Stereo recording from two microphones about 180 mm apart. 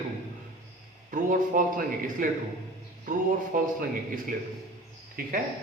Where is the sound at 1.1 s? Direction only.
45° right (ahead or behind).